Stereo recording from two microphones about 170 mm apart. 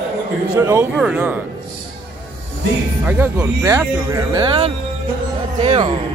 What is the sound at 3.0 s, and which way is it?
Speech, 10° right (ahead or behind).